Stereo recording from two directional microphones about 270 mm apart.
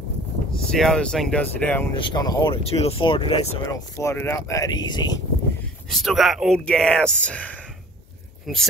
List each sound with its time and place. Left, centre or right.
0.5 s speech: centre; by 3.2 s left
3.3 s speech: left
3.6 s speech: centre
5.9 s speech: centre